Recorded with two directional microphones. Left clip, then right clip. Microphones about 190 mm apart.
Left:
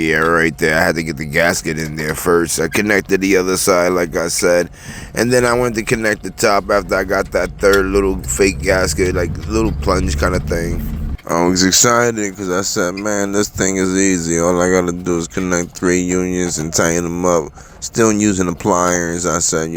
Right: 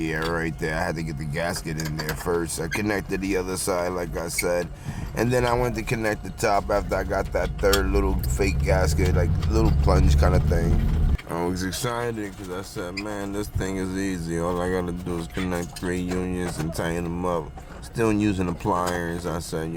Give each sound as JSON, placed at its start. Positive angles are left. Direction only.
{"t": 0.0, "sound": "speech", "side_deg": 25}